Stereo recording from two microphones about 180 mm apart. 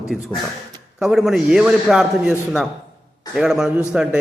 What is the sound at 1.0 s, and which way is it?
A man's voice, centre (ahead or behind).